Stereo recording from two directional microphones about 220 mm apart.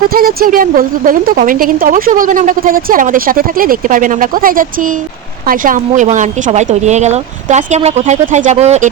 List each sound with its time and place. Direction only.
0.1 s a woman's voice: 40° right (ahead or behind)